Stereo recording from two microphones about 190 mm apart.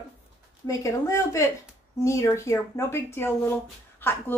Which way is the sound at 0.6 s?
15° left (ahead or behind).